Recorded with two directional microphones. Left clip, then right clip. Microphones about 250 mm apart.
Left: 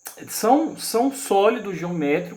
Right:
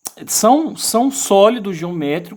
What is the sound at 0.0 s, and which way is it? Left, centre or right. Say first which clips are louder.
Speech: right 8 dB; right.